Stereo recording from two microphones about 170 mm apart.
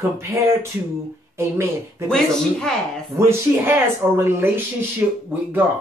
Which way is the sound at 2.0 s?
5° left (ahead or behind).